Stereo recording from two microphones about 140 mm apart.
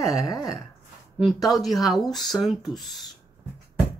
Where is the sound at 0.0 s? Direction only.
25° left (ahead or behind).